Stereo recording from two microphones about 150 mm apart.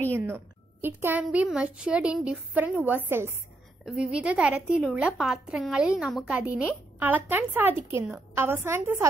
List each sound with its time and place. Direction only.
0.1 s a woman's voice: 15° right (ahead or behind)